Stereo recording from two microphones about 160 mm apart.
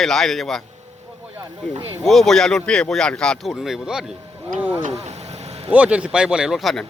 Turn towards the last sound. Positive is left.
turn(degrees=0)  # may be behind; listen again after turning